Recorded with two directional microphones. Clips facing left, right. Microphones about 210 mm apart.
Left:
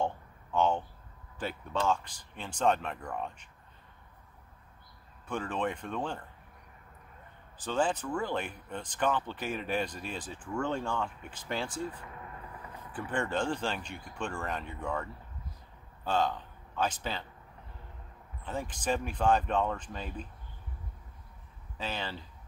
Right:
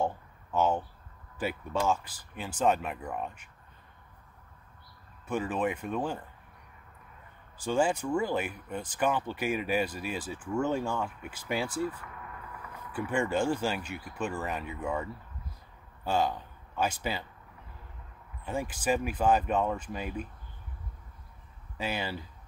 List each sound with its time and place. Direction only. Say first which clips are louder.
0.0 s a sound: right 2 dB; 5° right (ahead or behind)
1.4 s speech: right 2 dB; 10° right (ahead or behind)
5.3 s speech: right 3 dB; 5° right (ahead or behind)
7.5 s speech: right 3 dB; 10° right (ahead or behind)
11.8 s a sound: right 4 dB; 25° left (ahead or behind)
12.9 s speech: right 4 dB; 10° right (ahead or behind)
18.4 s speech: right 3 dB; 10° right (ahead or behind)
21.7 s speech: right 3 dB; 10° right (ahead or behind)